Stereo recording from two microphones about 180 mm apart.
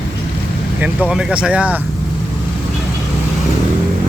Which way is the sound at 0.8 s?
5° right (ahead or behind).